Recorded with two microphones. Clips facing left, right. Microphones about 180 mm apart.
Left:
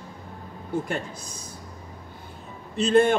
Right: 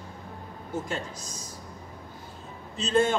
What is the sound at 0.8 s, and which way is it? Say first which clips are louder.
Speech: left 3 dB; 60° left (ahead or behind).